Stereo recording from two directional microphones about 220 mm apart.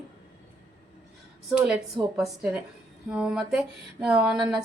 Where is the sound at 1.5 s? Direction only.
5° right (ahead or behind).